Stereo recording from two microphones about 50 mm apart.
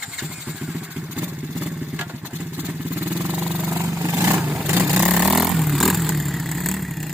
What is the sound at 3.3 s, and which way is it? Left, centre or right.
Vehicle, right.